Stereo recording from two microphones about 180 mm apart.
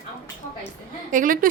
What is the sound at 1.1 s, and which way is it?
Speech, 50° right (ahead or behind).